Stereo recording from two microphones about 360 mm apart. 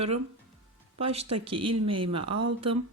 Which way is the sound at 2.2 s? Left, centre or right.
Right.